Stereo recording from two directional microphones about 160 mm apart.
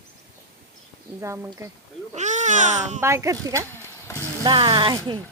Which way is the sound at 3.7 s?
15° left (ahead or behind).